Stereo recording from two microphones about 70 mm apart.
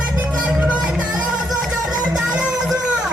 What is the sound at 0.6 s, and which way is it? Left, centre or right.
Music, centre.